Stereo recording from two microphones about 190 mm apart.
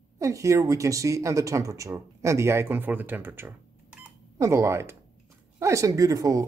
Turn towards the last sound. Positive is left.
turn(degrees=-20)  # may be behind; listen again after turning